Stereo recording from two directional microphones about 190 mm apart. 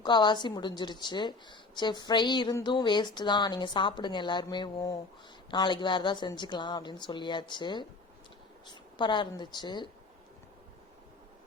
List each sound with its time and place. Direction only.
0.0 s a woman's voice: 25° left (ahead or behind)